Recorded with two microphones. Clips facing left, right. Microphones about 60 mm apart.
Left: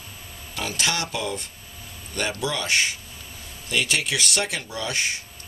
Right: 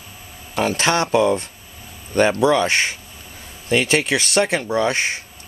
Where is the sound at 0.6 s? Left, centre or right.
Right.